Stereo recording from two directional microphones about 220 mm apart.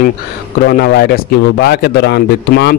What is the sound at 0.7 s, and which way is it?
A man's voice, 45° left (ahead or behind).